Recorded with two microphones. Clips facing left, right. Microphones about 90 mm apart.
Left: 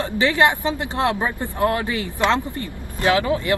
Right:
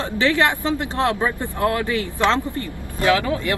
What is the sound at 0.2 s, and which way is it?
Speech, 20° left (ahead or behind).